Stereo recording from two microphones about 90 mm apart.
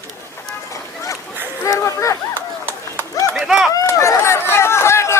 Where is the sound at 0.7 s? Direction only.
35° left (ahead or behind).